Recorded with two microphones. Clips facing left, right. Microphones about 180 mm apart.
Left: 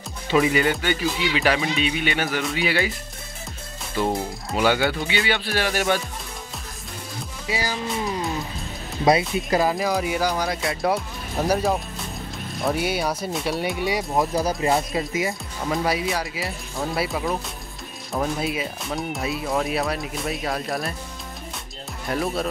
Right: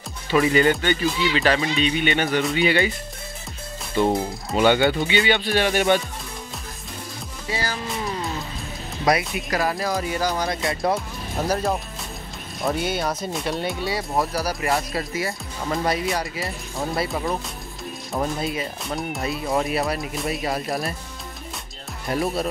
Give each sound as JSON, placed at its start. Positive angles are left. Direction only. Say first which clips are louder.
{"t": 0.3, "sound": "speech", "louder": "right 2 dB", "side_deg": 10}
{"t": 4.0, "sound": "speech", "louder": "right 3 dB", "side_deg": 5}
{"t": 7.4, "sound": "speech", "louder": "left 1 dB", "side_deg": 10}
{"t": 9.0, "sound": "speech", "louder": "left 3 dB", "side_deg": 25}
{"t": 12.6, "sound": "speech", "louder": "even", "side_deg": 10}
{"t": 13.7, "sound": "speech", "louder": "left 2 dB", "side_deg": 15}
{"t": 15.7, "sound": "speech", "louder": "even", "side_deg": 0}
{"t": 22.1, "sound": "speech", "louder": "right 1 dB", "side_deg": 0}